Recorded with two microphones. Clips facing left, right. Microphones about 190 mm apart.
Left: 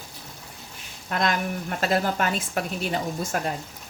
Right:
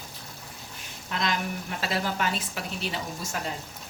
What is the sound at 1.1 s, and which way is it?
A woman's voice, 50° left (ahead or behind).